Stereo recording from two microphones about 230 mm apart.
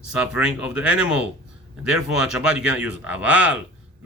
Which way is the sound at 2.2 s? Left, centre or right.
Left.